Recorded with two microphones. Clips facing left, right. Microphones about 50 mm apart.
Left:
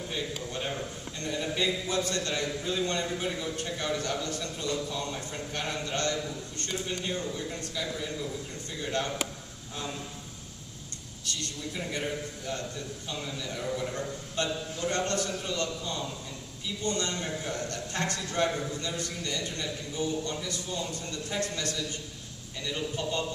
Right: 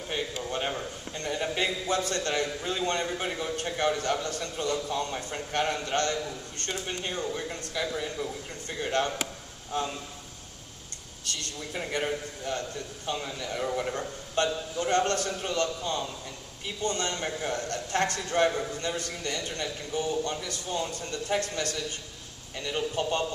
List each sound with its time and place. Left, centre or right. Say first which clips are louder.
0.1 s a man's voice: right 5 dB; right
11.4 s a man's voice: right 1 dB; right
22.6 s a man's voice: right 3 dB; right